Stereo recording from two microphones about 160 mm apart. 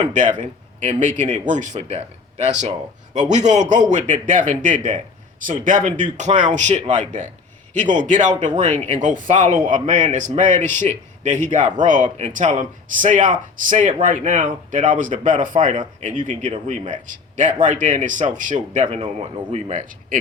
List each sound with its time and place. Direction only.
0.1 s speech: 50° right (ahead or behind)